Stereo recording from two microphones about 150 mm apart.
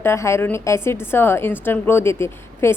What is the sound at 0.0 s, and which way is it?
A woman's voice, 15° left (ahead or behind).